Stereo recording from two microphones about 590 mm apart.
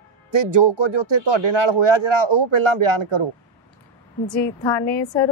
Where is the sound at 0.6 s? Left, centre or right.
Right.